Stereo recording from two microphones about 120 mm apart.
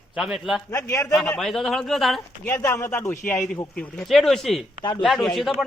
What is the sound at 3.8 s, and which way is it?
Speech, 5° left (ahead or behind).